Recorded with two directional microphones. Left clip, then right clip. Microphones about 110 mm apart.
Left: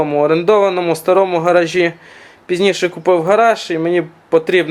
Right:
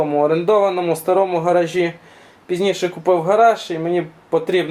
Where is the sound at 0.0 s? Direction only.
25° left (ahead or behind).